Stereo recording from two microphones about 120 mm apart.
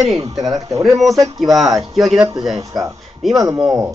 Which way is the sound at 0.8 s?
Centre (ahead or behind).